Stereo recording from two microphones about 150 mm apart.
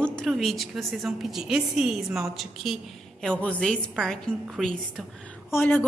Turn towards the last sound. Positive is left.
turn(degrees=10)  # may be behind; listen again after turning